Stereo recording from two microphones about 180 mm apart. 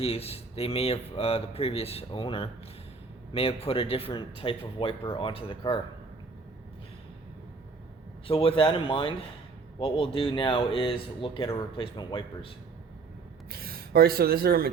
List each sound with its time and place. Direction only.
0.0 s speech: 35° left (ahead or behind)
8.3 s speech: 30° left (ahead or behind)
13.5 s speech: 55° right (ahead or behind)